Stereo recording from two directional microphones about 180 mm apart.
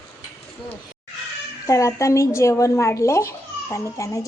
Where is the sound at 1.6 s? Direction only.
15° left (ahead or behind).